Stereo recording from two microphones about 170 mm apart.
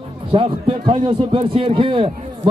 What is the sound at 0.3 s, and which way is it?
A man's voice, 30° right (ahead or behind).